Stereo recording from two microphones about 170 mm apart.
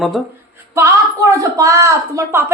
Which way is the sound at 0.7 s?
20° right (ahead or behind).